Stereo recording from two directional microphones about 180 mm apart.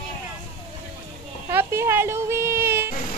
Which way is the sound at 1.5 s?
15° right (ahead or behind).